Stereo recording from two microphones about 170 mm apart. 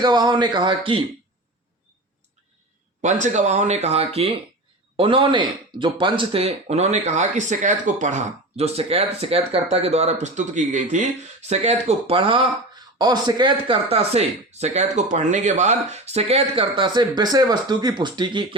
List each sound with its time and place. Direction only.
0.0 s speech: 25° right (ahead or behind)
3.0 s speech: 45° right (ahead or behind); by 18.4 s 25° right (ahead or behind)